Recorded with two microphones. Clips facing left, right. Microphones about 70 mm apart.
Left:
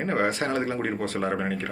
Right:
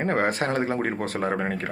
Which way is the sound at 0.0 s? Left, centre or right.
Right.